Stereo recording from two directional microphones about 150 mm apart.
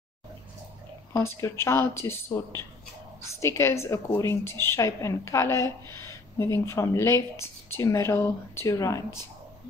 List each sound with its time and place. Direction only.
1.1 s a woman's voice: 20° left (ahead or behind)